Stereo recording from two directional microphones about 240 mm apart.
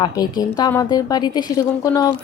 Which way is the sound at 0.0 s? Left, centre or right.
Centre.